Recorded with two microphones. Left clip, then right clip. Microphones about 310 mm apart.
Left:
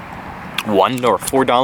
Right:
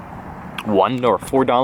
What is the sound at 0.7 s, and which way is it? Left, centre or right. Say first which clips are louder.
Speech: left 2 dB; centre.